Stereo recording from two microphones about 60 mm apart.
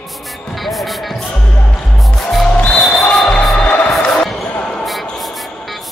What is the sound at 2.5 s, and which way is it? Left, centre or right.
Music, centre.